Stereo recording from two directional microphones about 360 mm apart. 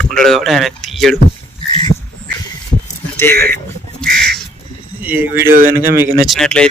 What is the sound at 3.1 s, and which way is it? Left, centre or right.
Speech, centre.